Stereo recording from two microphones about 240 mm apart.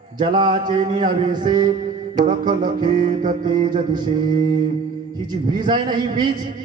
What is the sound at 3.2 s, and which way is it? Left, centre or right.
Music, right.